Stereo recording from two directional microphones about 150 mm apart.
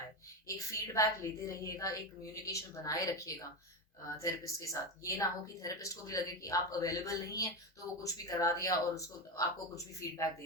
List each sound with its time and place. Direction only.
0.4 s speech: 20° left (ahead or behind)